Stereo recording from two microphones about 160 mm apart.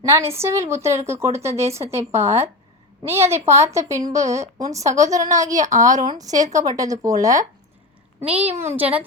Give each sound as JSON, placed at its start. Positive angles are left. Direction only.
{"t": 0.0, "sound": "a woman's voice", "side_deg": -15}
{"t": 8.6, "sound": "a woman's voice", "side_deg": -10}